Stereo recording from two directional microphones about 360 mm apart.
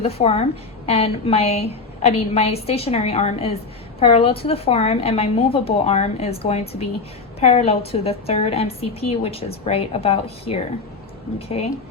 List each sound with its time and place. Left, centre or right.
0.0 s a woman's voice: centre